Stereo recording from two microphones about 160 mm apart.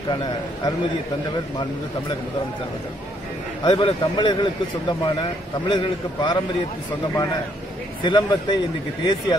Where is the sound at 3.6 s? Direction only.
30° left (ahead or behind).